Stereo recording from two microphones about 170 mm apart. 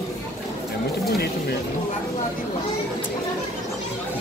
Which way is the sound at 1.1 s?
70° left (ahead or behind).